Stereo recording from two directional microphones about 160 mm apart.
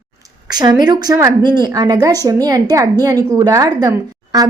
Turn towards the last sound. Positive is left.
turn(degrees=-20)  # may be behind; listen again after turning